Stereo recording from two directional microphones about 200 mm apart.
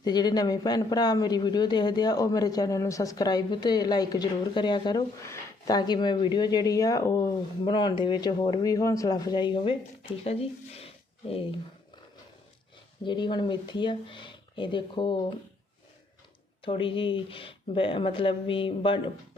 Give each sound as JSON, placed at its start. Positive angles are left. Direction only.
{"t": 0.0, "sound": "speech", "side_deg": 20}
{"t": 13.1, "sound": "speech", "side_deg": 25}
{"t": 16.6, "sound": "speech", "side_deg": 25}